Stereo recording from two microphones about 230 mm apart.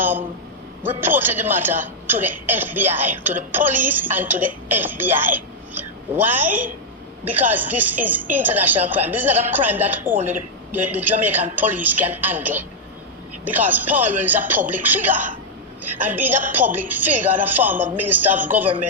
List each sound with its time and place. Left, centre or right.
0.0 s a man's voice: centre
10.2 s speech: right
10.7 s speech: centre
13.7 s speech: centre
15.1 s speech: right
16.0 s speech: centre